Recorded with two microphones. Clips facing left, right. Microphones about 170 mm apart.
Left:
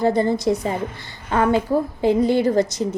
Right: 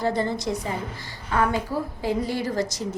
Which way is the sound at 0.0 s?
50° left (ahead or behind).